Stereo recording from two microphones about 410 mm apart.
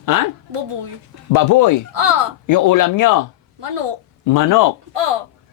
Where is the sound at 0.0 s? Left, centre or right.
Left.